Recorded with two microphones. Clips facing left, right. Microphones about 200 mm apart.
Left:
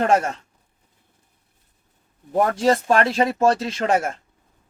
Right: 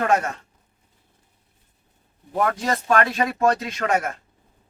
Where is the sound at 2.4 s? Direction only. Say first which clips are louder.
Left 5 dB; 30° left (ahead or behind).